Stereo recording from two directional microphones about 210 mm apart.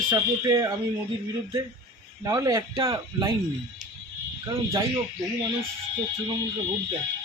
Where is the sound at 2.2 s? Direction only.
15° right (ahead or behind).